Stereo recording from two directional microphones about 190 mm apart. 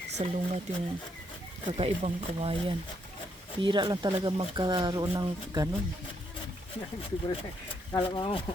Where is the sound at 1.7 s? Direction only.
30° right (ahead or behind).